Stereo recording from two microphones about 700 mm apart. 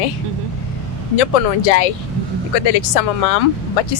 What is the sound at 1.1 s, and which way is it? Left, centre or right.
Speech, left.